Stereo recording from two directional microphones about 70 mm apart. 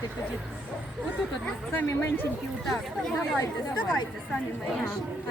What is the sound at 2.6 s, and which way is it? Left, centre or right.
Speech, centre.